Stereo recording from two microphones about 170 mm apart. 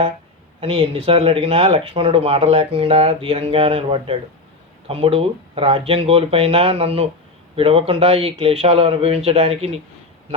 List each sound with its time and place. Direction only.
0.6 s speech: 35° right (ahead or behind)